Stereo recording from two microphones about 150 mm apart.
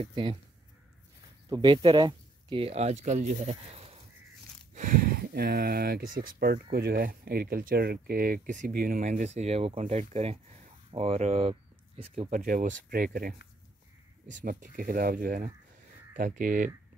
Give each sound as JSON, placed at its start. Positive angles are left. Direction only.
{"t": 0.0, "sound": "speech", "side_deg": -35}
{"t": 1.5, "sound": "speech", "side_deg": -30}
{"t": 4.7, "sound": "speech", "side_deg": -65}
{"t": 12.3, "sound": "speech", "side_deg": -60}
{"t": 14.2, "sound": "speech", "side_deg": -60}